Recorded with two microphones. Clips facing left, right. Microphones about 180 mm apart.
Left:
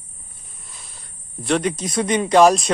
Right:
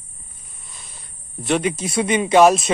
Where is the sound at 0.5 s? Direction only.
Centre (ahead or behind).